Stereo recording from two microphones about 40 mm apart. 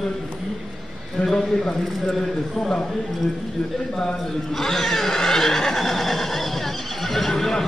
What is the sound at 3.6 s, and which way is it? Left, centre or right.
Speech, centre.